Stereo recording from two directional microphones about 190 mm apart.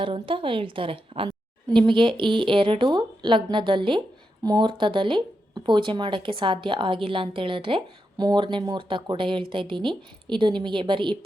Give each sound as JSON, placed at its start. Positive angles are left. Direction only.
{"t": 0.0, "sound": "speech", "side_deg": -25}